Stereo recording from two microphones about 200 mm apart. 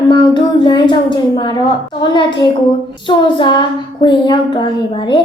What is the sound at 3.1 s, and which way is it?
Child singing, 25° left (ahead or behind).